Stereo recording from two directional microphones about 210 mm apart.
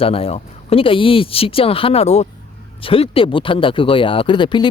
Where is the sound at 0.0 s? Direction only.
25° left (ahead or behind).